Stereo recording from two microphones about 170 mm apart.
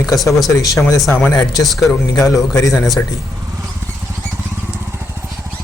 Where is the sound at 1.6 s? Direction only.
Centre (ahead or behind).